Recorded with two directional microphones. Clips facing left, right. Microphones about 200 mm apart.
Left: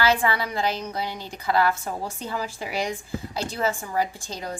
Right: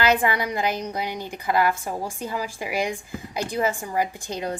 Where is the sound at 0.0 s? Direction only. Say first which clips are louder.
Right 1 dB; 20° right (ahead or behind).